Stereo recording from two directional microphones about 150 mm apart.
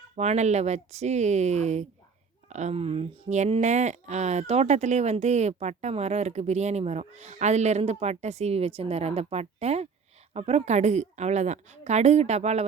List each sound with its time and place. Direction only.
0.2 s speech: 50° right (ahead or behind)